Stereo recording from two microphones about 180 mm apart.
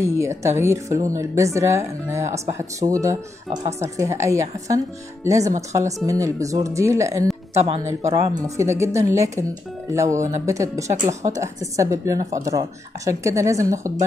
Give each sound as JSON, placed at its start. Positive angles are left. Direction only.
{"t": 0.0, "sound": "speech", "side_deg": -15}
{"t": 7.5, "sound": "speech", "side_deg": -35}
{"t": 8.1, "sound": "speech", "side_deg": -15}